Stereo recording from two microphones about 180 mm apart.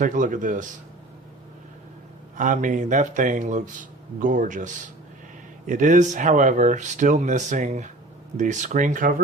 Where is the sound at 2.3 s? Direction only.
45° right (ahead or behind).